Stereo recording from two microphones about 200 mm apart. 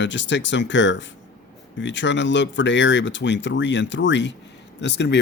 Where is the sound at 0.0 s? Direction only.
65° left (ahead or behind).